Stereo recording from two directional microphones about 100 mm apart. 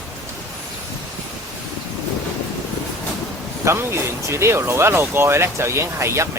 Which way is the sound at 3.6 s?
30° right (ahead or behind).